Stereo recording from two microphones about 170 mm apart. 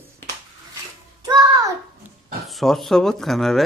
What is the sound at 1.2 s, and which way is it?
Child singing, 20° right (ahead or behind).